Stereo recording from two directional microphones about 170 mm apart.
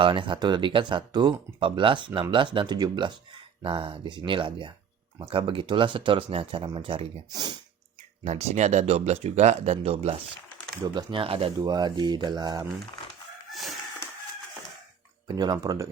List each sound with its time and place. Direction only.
0.0 s speech: 30° right (ahead or behind)
8.2 s speech: 40° right (ahead or behind); by 12.6 s 25° right (ahead or behind)
13.5 s chicken: centre (ahead or behind)
15.3 s speech: 25° right (ahead or behind)